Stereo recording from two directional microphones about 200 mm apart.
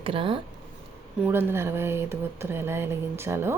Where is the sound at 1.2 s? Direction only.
10° right (ahead or behind).